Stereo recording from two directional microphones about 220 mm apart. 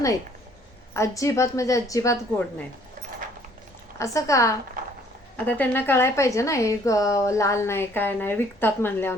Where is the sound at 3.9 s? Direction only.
15° left (ahead or behind).